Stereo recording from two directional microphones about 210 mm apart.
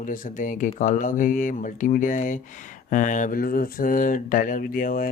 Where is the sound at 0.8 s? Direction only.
40° left (ahead or behind).